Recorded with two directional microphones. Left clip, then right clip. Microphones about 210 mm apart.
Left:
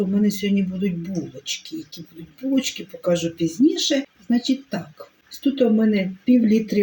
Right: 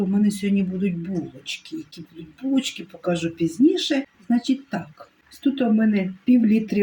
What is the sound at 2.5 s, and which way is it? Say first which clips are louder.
Speech: left 2 dB; 15° right (ahead or behind).